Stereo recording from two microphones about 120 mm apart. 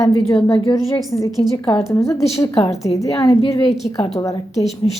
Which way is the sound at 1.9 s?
25° left (ahead or behind).